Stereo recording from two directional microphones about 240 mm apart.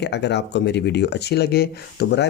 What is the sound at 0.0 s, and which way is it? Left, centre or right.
Speech, left.